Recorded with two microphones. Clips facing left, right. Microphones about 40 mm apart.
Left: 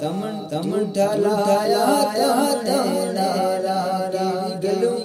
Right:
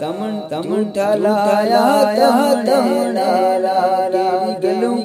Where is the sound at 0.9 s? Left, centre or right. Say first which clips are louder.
Right 4 dB; right.